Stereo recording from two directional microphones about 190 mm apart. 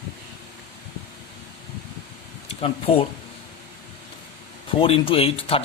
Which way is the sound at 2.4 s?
30° left (ahead or behind).